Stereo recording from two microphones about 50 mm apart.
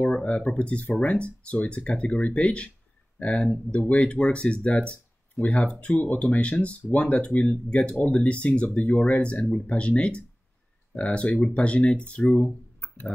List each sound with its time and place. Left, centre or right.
0.0 s speech: left
12.2 s speech: centre
12.8 s a sound: left